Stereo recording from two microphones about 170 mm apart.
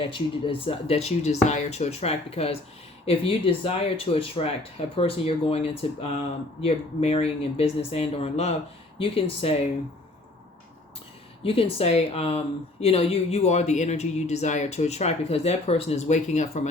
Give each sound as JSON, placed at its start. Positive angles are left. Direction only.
{"t": 0.0, "sound": "speech", "side_deg": 30}
{"t": 11.4, "sound": "speech", "side_deg": 35}